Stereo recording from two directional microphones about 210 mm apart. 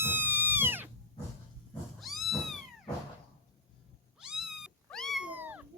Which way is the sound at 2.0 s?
Centre (ahead or behind).